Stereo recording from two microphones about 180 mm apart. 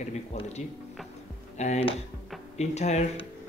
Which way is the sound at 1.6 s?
35° left (ahead or behind).